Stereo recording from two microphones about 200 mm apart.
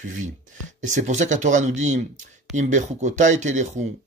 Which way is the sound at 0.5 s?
40° right (ahead or behind).